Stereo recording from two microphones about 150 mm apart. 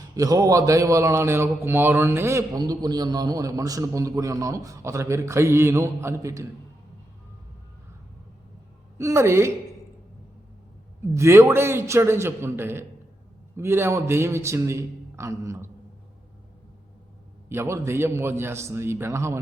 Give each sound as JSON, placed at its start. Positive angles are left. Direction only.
{"t": 0.2, "sound": "speech", "side_deg": -25}
{"t": 9.0, "sound": "a man's voice", "side_deg": -20}
{"t": 11.0, "sound": "a man's voice", "side_deg": -20}
{"t": 17.5, "sound": "a man's voice", "side_deg": -15}